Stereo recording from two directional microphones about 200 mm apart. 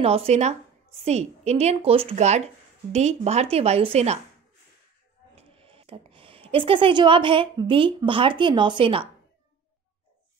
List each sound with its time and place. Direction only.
0.0 s speech: 30° right (ahead or behind)
5.3 s a sound: 30° right (ahead or behind)
6.5 s a woman's voice: 25° right (ahead or behind)